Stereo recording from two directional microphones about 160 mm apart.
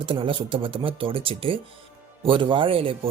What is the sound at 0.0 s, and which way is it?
Speech, 35° right (ahead or behind).